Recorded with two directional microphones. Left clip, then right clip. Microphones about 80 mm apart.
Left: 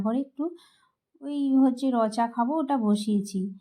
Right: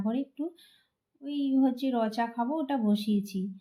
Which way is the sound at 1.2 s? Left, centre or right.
Left.